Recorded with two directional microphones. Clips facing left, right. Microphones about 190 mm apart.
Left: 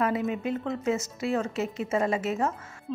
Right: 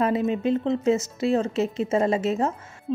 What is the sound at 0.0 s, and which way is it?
A woman's voice, 25° right (ahead or behind).